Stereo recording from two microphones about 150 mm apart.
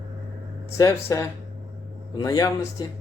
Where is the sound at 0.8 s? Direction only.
20° left (ahead or behind).